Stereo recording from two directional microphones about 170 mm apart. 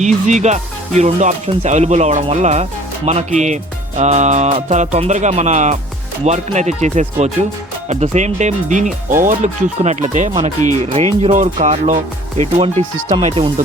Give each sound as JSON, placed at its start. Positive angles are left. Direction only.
{"t": 0.0, "sound": "speech", "side_deg": -45}